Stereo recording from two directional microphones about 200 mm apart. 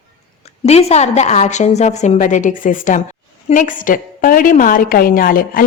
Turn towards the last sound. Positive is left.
turn(degrees=45)  # may be behind; listen again after turning